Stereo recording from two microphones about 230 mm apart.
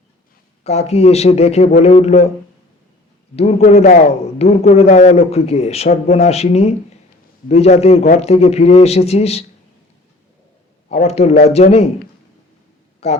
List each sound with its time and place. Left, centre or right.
0.6 s a man's voice: left
3.3 s a man's voice: left
10.8 s a man's voice: left
13.0 s a man's voice: left